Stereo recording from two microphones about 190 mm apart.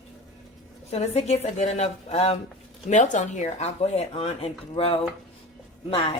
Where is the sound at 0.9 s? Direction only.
35° left (ahead or behind).